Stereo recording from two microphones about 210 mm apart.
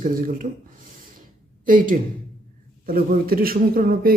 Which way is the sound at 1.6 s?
40° right (ahead or behind).